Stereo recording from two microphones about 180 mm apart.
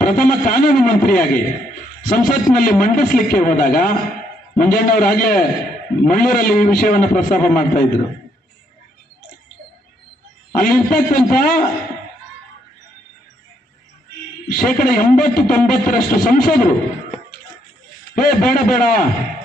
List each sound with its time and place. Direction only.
0.0 s a man's voice: 50° left (ahead or behind)
10.5 s a man's voice: 50° left (ahead or behind)
14.5 s a man's voice: 50° left (ahead or behind)
18.2 s a man's voice: 50° left (ahead or behind)